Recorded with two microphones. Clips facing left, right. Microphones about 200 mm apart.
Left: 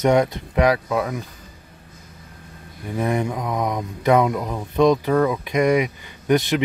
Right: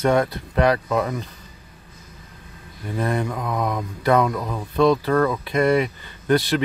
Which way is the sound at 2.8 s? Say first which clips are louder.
Left 2 dB; 15° left (ahead or behind).